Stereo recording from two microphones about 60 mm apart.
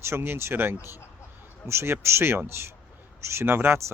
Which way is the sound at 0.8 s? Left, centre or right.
Left.